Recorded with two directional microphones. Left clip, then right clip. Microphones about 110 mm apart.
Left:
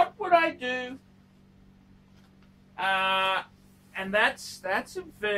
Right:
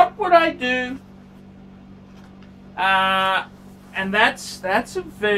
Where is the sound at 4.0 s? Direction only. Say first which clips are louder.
Right 7 dB; 15° right (ahead or behind).